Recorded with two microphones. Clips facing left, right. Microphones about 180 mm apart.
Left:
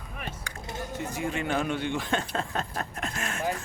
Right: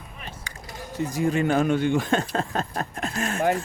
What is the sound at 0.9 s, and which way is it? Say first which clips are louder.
Speech: right 9 dB; 40° right (ahead or behind).